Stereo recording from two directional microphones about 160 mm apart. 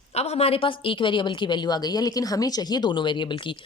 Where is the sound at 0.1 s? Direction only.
40° left (ahead or behind).